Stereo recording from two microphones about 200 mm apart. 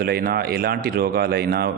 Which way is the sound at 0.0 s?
50° right (ahead or behind).